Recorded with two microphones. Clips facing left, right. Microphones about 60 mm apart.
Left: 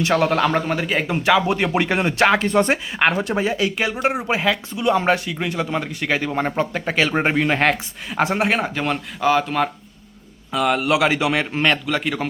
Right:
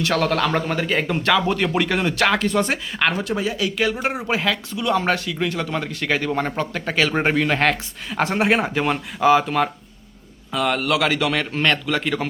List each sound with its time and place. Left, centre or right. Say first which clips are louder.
0.0 s a man's voice: left 2 dB; centre
10.8 s speech: left 2 dB; centre